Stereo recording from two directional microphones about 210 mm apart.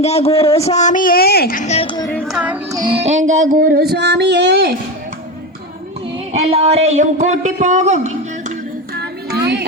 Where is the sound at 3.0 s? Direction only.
35° right (ahead or behind); by 4.7 s 50° right (ahead or behind).